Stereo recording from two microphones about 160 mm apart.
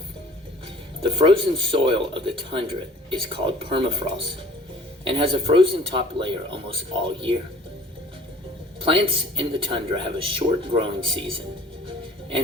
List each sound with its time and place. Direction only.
1.0 s speech: 30° right (ahead or behind)
8.8 s speech: 35° right (ahead or behind)